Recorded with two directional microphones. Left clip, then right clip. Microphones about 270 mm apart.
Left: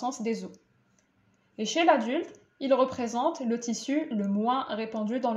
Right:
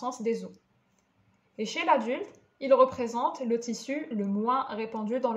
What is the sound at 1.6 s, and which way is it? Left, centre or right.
Speech, right.